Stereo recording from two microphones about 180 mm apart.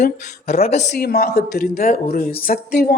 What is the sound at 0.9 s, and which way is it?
A woman's voice, 60° left (ahead or behind).